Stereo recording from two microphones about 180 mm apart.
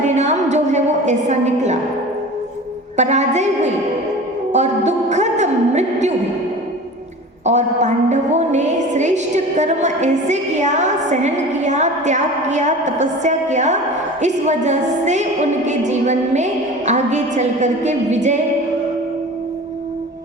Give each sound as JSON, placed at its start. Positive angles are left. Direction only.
{"t": 0.0, "sound": "a sound", "side_deg": -40}
{"t": 3.0, "sound": "a woman's voice", "side_deg": -40}
{"t": 7.4, "sound": "a woman's voice", "side_deg": -40}